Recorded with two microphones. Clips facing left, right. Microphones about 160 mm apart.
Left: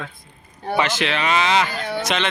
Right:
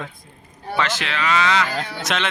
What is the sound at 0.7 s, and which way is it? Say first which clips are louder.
Speech: left 2 dB; 15° left (ahead or behind).